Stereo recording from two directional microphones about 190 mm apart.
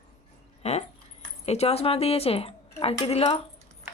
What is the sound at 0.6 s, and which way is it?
Speech, 35° left (ahead or behind).